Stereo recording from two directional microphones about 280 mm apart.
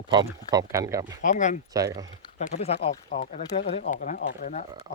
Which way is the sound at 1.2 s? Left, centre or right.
Left.